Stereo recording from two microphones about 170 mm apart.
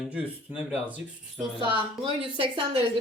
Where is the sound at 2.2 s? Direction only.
30° right (ahead or behind).